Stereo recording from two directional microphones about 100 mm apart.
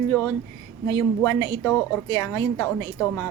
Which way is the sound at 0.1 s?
35° left (ahead or behind).